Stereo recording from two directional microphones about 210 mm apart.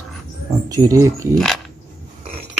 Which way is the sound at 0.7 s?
15° right (ahead or behind).